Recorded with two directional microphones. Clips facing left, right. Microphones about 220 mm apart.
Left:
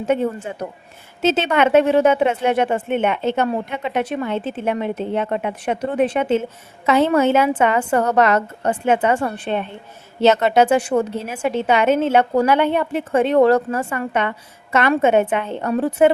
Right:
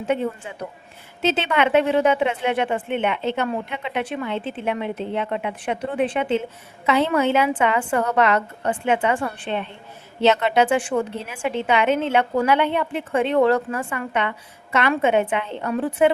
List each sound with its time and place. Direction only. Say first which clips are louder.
0.0 s a woman's voice: left 4 dB; 45° left (ahead or behind)